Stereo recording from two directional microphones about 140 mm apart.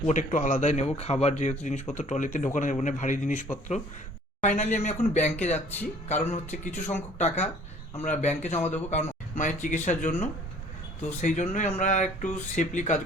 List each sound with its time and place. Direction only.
0.0 s speech: 60° left (ahead or behind)